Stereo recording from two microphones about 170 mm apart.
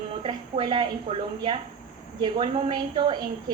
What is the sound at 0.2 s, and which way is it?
A woman's voice, 30° right (ahead or behind).